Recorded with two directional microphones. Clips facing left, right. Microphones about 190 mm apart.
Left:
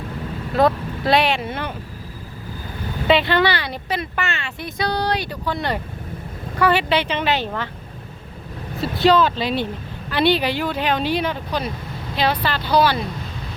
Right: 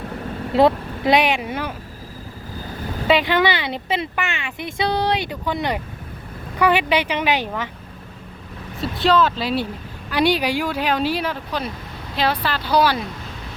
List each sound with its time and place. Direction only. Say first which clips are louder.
0.5 s speech: right 2 dB; 20° right (ahead or behind)
3.1 s speech: even; 15° right (ahead or behind)
8.8 s speech: left 2 dB; centre (ahead or behind)